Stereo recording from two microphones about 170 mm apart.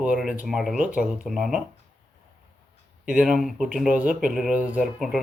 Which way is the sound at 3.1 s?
5° right (ahead or behind).